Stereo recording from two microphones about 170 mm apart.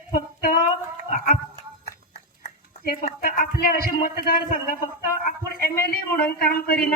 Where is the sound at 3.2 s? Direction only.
55° left (ahead or behind).